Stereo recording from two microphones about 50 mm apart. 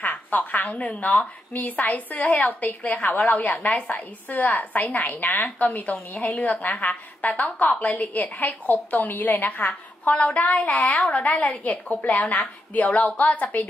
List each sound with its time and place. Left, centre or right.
0.0 s a sound: left
1.0 s a woman's voice: left
12.4 s a woman's voice: left